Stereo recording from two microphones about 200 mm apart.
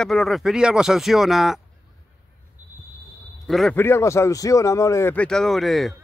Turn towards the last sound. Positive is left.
turn(degrees=0)  # may be behind; listen again after turning